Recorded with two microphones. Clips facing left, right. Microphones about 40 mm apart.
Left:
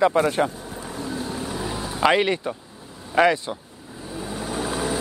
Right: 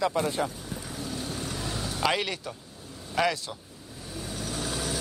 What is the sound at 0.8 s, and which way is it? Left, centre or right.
Vehicle, left.